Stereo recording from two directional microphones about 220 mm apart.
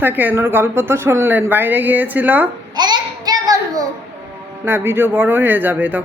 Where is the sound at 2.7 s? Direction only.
20° right (ahead or behind).